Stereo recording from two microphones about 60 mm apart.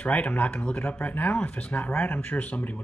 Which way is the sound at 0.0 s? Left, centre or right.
Left.